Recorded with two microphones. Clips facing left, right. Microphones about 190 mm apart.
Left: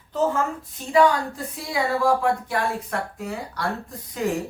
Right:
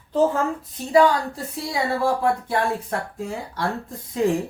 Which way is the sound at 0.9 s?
30° right (ahead or behind).